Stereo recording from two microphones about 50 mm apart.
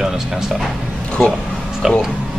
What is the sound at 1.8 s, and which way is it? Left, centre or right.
Speech, centre.